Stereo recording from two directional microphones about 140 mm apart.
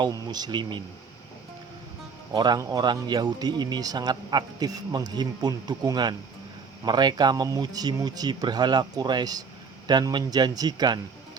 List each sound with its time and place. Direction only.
0.0 s speech: 30° right (ahead or behind)
2.3 s speech: 30° right (ahead or behind)